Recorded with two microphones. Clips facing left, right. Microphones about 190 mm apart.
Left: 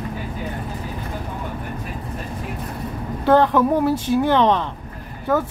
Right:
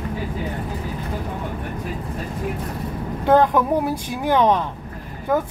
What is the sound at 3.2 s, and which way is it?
Speech, 15° right (ahead or behind).